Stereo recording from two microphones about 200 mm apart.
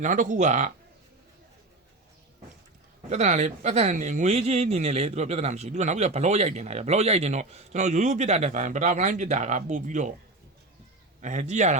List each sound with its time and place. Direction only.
0.0 s speech: 40° right (ahead or behind)
3.1 s speech: 35° right (ahead or behind)
11.2 s speech: 35° right (ahead or behind)